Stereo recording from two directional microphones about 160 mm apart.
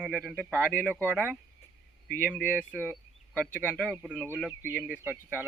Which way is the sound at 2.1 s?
10° left (ahead or behind).